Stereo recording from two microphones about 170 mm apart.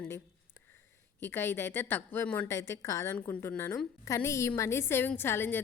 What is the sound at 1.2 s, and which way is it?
A woman's voice, 15° left (ahead or behind).